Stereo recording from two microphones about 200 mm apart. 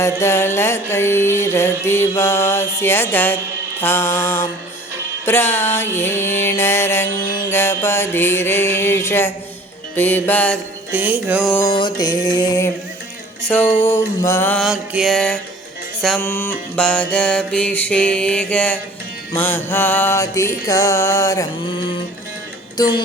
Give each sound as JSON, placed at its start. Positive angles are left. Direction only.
{"t": 0.0, "sound": "music", "side_deg": 15}
{"t": 10.9, "sound": "music", "side_deg": -10}
{"t": 11.4, "sound": "music", "side_deg": 10}
{"t": 11.7, "sound": "music", "side_deg": 20}
{"t": 14.6, "sound": "mantra", "side_deg": 0}
{"t": 16.0, "sound": "music", "side_deg": 0}
{"t": 16.2, "sound": "mantra", "side_deg": 10}
{"t": 19.4, "sound": "music", "side_deg": 10}